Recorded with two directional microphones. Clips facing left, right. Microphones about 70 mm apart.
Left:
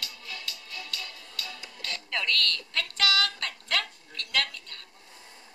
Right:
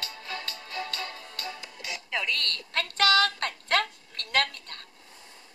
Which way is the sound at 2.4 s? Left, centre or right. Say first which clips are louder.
Even; right.